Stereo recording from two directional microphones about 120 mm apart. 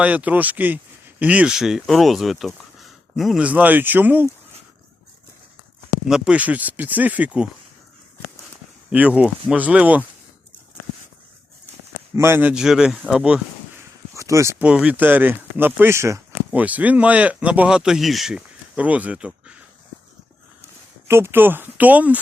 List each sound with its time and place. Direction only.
0.0 s speech: 10° right (ahead or behind)
3.4 s speech: 15° right (ahead or behind)
6.1 s speech: 5° right (ahead or behind)
8.9 s speech: 10° right (ahead or behind)
12.1 s speech: 20° right (ahead or behind)
12.5 s speech: 5° right (ahead or behind)
14.1 s a sound: 25° right (ahead or behind)
14.6 s speech: 10° right (ahead or behind)
16.5 s speech: 15° right (ahead or behind)
21.1 s speech: 20° right (ahead or behind)